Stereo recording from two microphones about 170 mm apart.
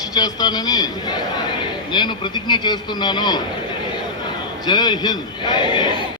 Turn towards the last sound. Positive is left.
turn(degrees=25)  # may be behind; listen again after turning